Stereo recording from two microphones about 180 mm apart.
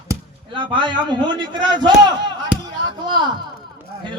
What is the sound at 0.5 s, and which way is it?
A man's voice, 25° right (ahead or behind).